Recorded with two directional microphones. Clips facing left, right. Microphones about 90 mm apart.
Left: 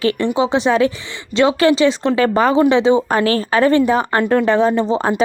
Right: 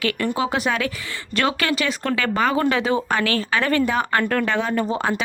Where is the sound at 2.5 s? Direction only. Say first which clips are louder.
Left 8 dB; 20° left (ahead or behind).